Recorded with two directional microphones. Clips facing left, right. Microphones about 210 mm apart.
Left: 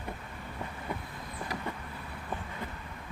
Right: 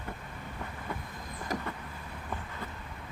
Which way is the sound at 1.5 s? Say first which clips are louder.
Right 5 dB; 45° right (ahead or behind).